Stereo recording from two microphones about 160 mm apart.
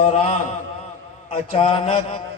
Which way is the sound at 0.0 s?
40° left (ahead or behind).